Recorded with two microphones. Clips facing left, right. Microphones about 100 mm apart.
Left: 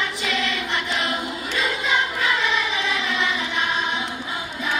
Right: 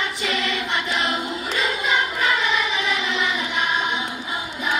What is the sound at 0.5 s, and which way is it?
Choir, 20° right (ahead or behind).